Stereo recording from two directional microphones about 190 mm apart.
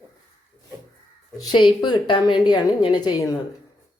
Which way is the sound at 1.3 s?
20° left (ahead or behind).